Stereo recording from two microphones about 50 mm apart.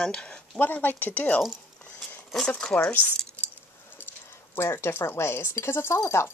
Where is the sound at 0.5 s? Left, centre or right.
Left.